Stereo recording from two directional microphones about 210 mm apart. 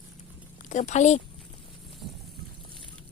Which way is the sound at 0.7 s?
35° left (ahead or behind).